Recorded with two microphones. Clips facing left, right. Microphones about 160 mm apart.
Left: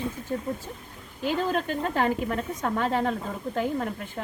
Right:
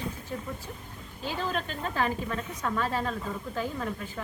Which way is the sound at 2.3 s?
35° left (ahead or behind).